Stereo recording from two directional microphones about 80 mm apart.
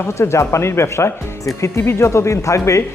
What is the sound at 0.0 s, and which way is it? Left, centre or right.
Speech, left.